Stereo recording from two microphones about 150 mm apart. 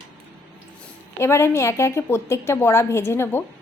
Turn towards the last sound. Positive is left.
turn(degrees=15)  # may be behind; listen again after turning